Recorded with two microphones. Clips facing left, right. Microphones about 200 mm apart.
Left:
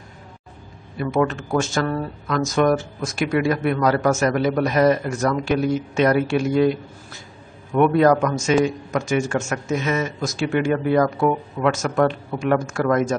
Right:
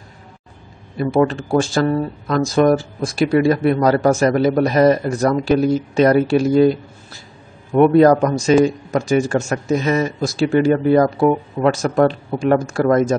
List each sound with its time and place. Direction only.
0.9 s speech: 35° right (ahead or behind)